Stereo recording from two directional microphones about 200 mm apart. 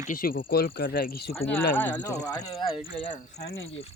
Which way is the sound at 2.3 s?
20° left (ahead or behind).